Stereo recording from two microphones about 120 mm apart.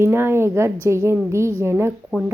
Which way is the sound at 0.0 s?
20° right (ahead or behind).